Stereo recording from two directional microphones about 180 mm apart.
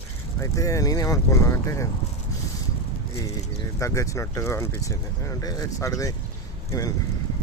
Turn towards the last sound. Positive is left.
turn(degrees=20)  # may be behind; listen again after turning